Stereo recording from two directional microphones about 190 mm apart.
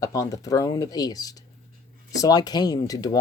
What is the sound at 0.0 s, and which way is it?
Speech, 20° left (ahead or behind).